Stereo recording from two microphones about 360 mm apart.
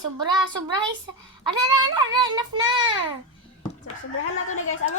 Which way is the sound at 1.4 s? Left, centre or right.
Centre.